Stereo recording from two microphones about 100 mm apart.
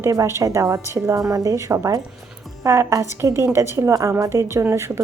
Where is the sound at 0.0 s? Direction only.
30° right (ahead or behind).